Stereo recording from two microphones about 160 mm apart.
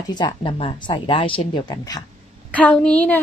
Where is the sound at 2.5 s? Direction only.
5° left (ahead or behind).